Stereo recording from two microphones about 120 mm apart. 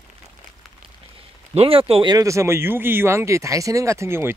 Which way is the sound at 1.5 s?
55° right (ahead or behind).